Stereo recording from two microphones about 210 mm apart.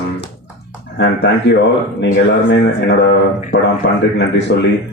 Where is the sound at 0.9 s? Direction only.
55° left (ahead or behind).